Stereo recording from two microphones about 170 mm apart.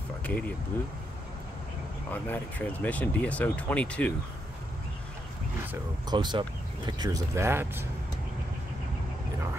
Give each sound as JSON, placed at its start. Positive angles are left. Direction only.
{"t": 0.2, "sound": "speech", "side_deg": 10}
{"t": 2.0, "sound": "speech", "side_deg": 10}
{"t": 6.0, "sound": "speech", "side_deg": -25}